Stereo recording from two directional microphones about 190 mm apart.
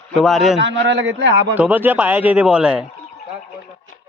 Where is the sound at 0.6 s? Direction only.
70° right (ahead or behind).